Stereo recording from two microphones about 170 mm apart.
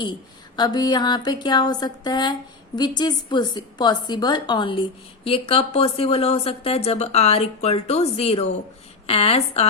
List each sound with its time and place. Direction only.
0.5 s a woman's voice: 25° left (ahead or behind)